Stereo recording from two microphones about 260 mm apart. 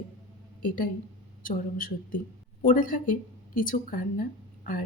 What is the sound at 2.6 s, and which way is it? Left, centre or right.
A woman's voice, left.